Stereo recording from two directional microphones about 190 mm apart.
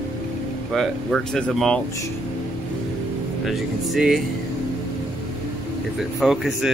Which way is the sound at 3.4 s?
Centre (ahead or behind).